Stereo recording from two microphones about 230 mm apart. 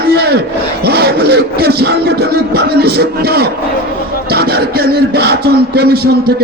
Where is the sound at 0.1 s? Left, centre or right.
Right.